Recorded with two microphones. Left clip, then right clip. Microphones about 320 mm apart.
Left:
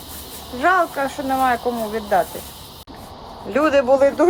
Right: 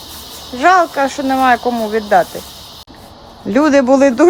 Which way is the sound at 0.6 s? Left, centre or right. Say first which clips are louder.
Right 7 dB; right.